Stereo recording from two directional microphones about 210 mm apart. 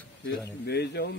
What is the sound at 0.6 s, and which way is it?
Speech, 50° left (ahead or behind).